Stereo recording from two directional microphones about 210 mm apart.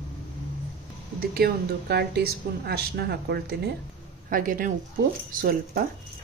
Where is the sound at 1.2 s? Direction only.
50° right (ahead or behind).